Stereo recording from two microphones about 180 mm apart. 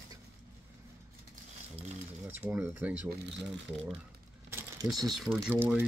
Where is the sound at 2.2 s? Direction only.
10° right (ahead or behind).